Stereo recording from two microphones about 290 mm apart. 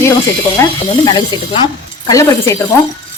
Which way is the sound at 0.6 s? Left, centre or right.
Centre.